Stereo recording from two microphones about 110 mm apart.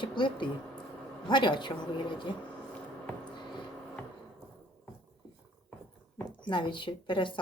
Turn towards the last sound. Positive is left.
turn(degrees=45)  # may be behind; listen again after turning